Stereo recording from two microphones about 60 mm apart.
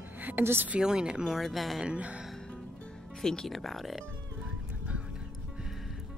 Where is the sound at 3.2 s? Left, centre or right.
Centre.